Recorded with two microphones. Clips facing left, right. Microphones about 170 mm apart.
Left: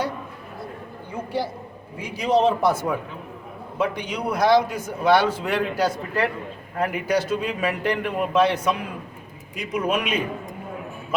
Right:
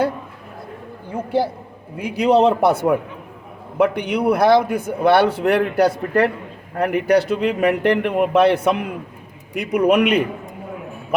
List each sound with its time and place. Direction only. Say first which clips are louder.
2.0 s a man's voice: right 5 dB; 60° right (ahead or behind)